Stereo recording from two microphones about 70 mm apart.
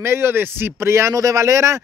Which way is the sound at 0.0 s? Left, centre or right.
Right.